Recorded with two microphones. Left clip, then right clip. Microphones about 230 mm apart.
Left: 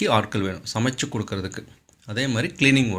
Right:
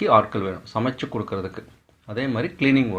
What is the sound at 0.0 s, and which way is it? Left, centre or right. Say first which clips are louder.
A man's voice: right 4 dB; left.